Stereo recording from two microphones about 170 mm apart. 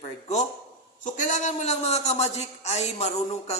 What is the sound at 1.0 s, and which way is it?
Speech, 45° left (ahead or behind).